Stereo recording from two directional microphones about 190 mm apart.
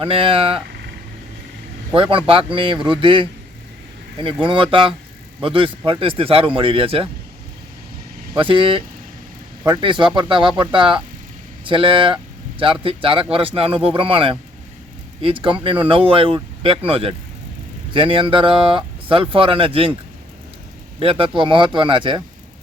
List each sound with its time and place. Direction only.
0.0 s speech: 30° right (ahead or behind)
2.0 s speech: 25° right (ahead or behind)
8.3 s speech: 25° right (ahead or behind)
21.0 s speech: 30° right (ahead or behind)